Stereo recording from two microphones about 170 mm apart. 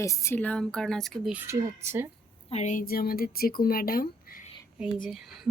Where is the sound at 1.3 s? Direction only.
15° right (ahead or behind).